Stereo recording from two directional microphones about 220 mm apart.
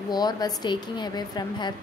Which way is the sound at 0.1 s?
20° left (ahead or behind).